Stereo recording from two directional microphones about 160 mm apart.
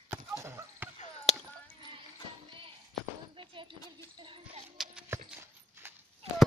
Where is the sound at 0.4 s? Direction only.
15° right (ahead or behind).